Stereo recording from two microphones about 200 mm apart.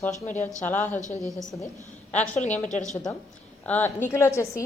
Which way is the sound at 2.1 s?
35° left (ahead or behind).